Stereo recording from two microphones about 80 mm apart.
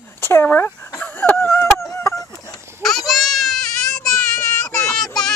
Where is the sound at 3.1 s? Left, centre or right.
Centre.